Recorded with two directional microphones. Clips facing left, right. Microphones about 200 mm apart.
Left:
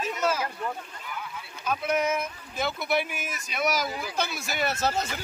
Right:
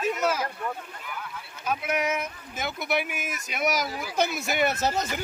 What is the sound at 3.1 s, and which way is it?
Speech, 10° right (ahead or behind).